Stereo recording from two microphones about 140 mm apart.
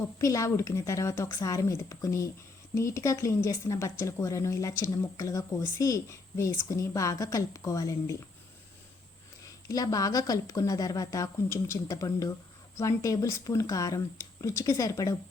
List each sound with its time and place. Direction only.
0.2 s a woman's voice: 20° left (ahead or behind)
9.6 s a woman's voice: 25° left (ahead or behind)